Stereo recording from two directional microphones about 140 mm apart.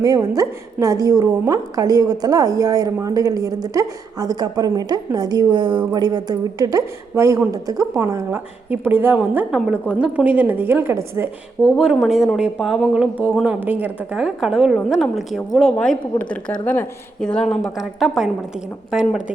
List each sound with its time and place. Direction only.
0.0 s a woman's voice: 25° right (ahead or behind)
12.0 s a woman's voice: centre (ahead or behind)